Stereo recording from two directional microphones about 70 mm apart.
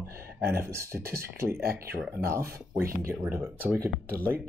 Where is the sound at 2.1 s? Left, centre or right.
Right.